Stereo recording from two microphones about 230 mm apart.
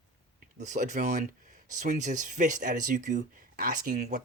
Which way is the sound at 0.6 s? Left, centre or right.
Right.